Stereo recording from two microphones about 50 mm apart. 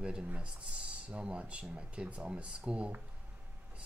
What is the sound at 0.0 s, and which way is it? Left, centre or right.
Speech, centre.